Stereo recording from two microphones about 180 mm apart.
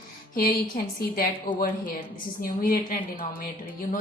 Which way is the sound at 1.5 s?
25° left (ahead or behind).